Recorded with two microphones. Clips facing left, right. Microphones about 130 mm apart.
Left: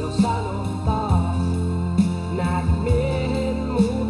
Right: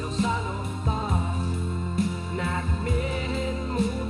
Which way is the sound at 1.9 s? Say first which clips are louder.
Left 6 dB; 30° left (ahead or behind).